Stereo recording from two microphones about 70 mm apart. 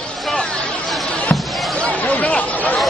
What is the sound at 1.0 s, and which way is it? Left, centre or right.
Basketball bounce, centre.